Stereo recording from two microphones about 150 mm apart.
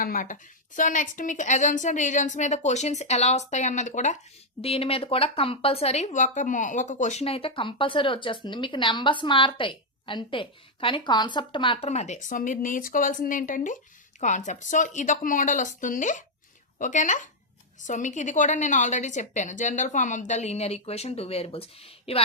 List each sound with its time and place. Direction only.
0.0 s a woman's voice: 65° left (ahead or behind)
4.6 s speech: 40° left (ahead or behind)
11.9 s a woman's voice: 50° left (ahead or behind)